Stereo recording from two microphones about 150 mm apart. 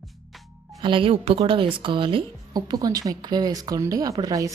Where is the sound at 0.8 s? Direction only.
35° right (ahead or behind).